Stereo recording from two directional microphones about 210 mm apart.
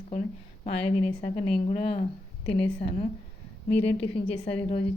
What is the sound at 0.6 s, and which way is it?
A woman's voice, 30° left (ahead or behind).